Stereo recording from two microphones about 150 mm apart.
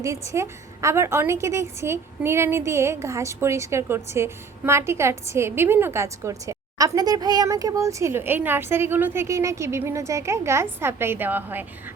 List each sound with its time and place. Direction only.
0.0 s a woman's voice: 20° right (ahead or behind)